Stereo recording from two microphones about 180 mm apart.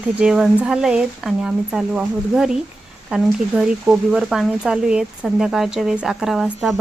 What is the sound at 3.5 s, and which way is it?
Speech, 5° right (ahead or behind).